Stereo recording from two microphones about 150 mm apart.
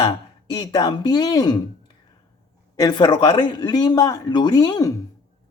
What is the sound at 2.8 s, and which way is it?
Speech, 30° left (ahead or behind).